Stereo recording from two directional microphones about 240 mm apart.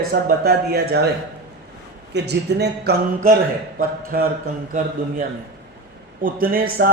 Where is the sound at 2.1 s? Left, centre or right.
Right.